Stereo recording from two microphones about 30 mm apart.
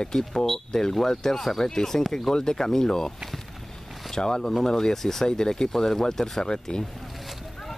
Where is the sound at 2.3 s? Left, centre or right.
Left.